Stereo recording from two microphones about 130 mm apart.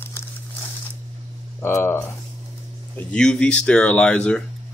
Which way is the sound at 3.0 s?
10° left (ahead or behind).